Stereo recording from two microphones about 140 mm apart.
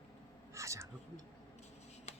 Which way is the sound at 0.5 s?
20° right (ahead or behind).